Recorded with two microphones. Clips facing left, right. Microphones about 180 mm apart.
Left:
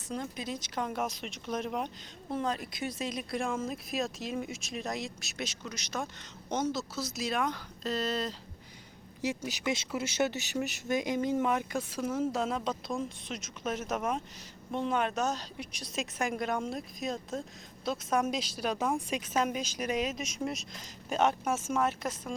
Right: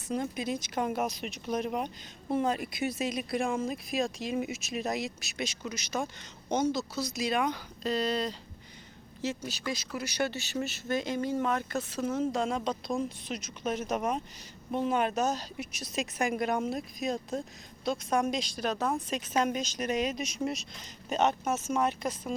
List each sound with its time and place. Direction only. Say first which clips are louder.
0.1 s speech: right 5 dB; 10° right (ahead or behind)
9.2 s speech: left 1 dB; 15° left (ahead or behind)